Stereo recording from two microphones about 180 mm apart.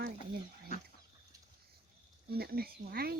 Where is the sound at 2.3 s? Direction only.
60° right (ahead or behind).